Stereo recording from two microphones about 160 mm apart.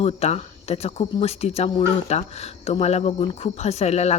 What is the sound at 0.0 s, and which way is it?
Speech, 40° left (ahead or behind).